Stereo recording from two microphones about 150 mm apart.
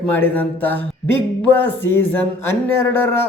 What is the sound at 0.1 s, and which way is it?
Speech, 10° left (ahead or behind).